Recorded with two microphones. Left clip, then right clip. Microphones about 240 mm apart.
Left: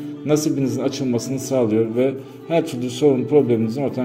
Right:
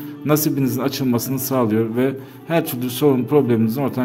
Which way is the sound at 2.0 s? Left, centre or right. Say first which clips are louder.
Left 1 dB; right.